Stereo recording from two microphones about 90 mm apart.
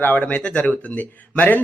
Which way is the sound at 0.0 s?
20° left (ahead or behind).